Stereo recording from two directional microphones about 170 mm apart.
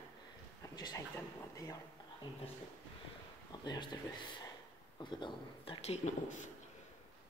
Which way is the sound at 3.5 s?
25° left (ahead or behind).